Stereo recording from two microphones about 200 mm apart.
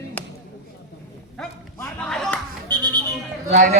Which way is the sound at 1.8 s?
5° left (ahead or behind).